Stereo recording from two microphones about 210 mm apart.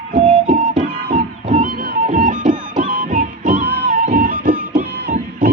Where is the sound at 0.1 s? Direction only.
40° right (ahead or behind).